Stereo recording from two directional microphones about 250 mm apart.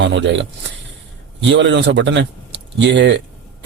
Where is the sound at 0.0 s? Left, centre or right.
Right.